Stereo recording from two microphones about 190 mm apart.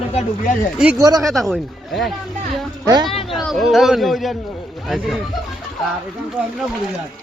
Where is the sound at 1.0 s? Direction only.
20° right (ahead or behind).